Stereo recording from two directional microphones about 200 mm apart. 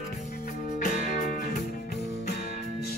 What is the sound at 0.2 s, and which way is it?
Music, 40° left (ahead or behind).